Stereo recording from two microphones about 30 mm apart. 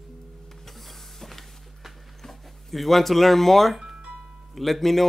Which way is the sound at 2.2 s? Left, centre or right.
Centre.